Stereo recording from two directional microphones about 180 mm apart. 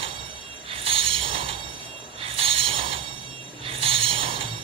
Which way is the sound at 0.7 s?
30° right (ahead or behind).